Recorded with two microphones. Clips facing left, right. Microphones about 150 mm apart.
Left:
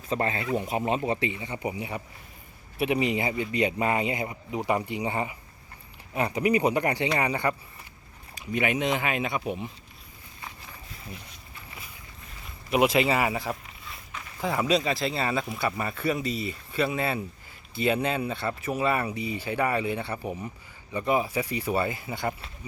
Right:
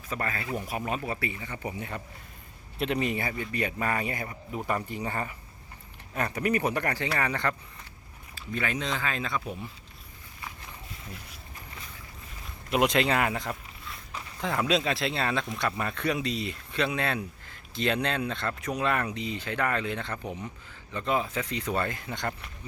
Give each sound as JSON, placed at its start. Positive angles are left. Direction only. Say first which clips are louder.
{"t": 0.1, "sound": "speech", "louder": "left 5 dB", "side_deg": 25}
{"t": 12.7, "sound": "speech", "louder": "left 2 dB", "side_deg": 5}